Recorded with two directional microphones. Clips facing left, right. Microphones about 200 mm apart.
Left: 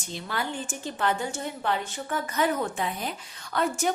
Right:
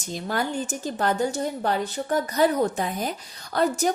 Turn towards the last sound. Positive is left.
turn(degrees=-40)  # may be behind; listen again after turning